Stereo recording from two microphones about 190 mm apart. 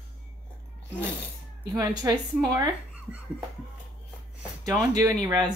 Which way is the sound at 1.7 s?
15° right (ahead or behind).